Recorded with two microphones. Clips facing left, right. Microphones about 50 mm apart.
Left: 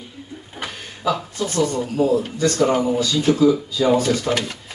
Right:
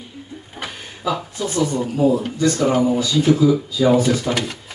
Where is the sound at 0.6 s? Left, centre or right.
Centre.